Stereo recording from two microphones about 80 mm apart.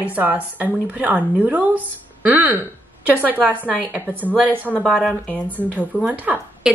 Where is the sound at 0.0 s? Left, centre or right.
Right.